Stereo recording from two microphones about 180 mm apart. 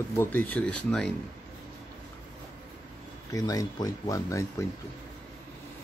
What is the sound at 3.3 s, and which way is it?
Speech, 20° left (ahead or behind).